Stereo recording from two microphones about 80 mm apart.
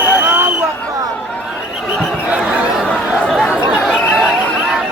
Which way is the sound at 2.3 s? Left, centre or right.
Centre.